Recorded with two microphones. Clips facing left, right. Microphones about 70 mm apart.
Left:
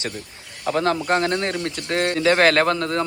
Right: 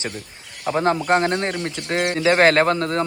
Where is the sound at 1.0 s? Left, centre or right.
Right.